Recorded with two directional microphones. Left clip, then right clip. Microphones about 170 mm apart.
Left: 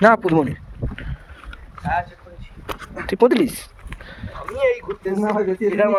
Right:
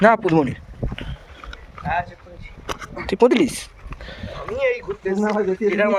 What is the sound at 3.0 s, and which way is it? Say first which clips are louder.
Speech: even; 15° left (ahead or behind).